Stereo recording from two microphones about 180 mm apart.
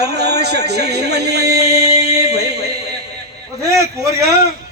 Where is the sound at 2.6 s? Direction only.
65° right (ahead or behind).